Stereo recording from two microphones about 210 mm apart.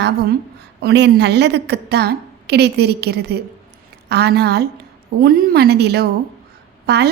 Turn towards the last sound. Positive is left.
turn(degrees=-50)  # may be behind; listen again after turning